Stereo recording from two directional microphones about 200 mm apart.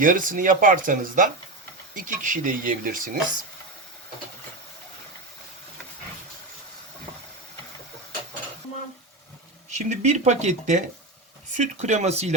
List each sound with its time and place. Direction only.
0.0 s speech: 40° right (ahead or behind)
9.7 s speech: 35° right (ahead or behind)